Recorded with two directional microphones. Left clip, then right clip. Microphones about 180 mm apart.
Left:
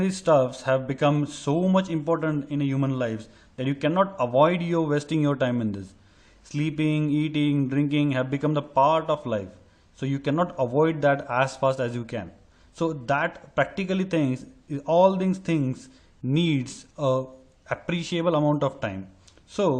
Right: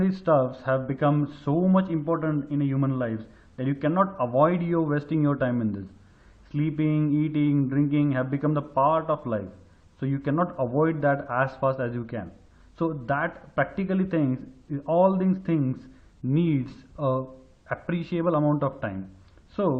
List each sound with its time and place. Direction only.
0.0 s speech: 40° left (ahead or behind)